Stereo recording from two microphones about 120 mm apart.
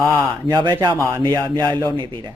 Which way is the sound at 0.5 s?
40° right (ahead or behind).